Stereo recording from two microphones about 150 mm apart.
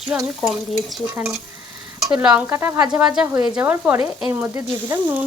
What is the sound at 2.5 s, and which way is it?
Speech, 15° right (ahead or behind).